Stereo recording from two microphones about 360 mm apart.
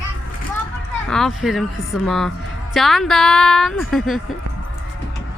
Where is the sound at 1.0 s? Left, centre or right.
Centre.